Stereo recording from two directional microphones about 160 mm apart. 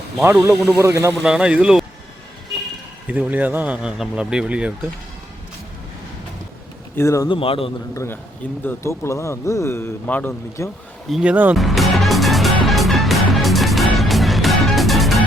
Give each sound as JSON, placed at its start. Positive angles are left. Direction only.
{"t": 0.2, "sound": "speech", "side_deg": -10}
{"t": 0.8, "sound": "speech", "side_deg": -15}
{"t": 1.2, "sound": "speech", "side_deg": -5}
{"t": 3.1, "sound": "speech", "side_deg": -10}
{"t": 6.9, "sound": "a man's voice", "side_deg": 15}
{"t": 7.3, "sound": "a man's voice", "side_deg": 35}
{"t": 7.9, "sound": "a man's voice", "side_deg": 15}
{"t": 11.1, "sound": "music", "side_deg": -5}